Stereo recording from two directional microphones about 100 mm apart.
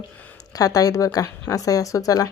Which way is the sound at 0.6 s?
35° left (ahead or behind).